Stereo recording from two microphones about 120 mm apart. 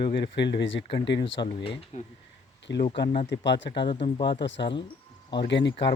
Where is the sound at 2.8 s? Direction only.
50° left (ahead or behind).